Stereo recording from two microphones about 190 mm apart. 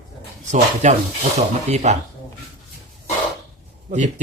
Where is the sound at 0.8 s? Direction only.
40° right (ahead or behind).